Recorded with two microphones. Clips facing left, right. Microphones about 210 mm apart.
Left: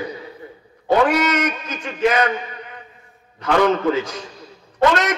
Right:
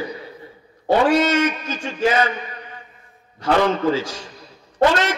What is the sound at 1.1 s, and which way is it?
A man's voice, 30° right (ahead or behind).